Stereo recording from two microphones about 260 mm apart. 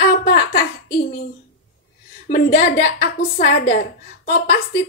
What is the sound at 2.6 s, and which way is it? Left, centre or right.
A woman's voice, left.